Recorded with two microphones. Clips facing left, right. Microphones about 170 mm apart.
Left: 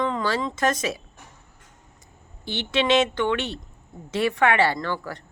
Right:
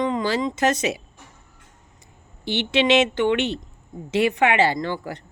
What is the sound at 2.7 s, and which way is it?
A woman's voice, 25° right (ahead or behind).